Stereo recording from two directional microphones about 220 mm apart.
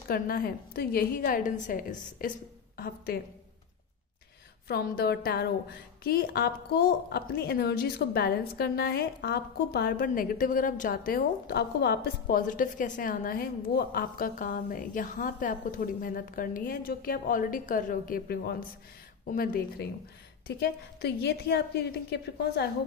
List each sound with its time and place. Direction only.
0.1 s a woman's voice: 40° left (ahead or behind)
4.6 s a woman's voice: 45° left (ahead or behind)